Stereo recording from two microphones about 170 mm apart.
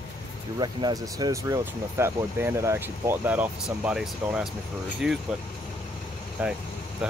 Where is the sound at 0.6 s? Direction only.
25° right (ahead or behind); by 5.2 s centre (ahead or behind).